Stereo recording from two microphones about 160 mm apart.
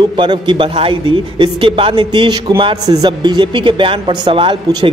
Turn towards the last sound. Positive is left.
turn(degrees=-30)  # may be behind; listen again after turning